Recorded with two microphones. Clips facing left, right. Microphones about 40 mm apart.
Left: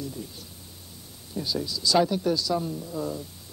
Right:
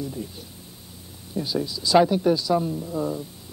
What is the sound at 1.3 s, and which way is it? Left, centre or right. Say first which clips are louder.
A woman's voice: right 3 dB; centre.